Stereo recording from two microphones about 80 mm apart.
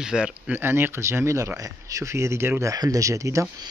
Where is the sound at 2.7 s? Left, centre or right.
Right.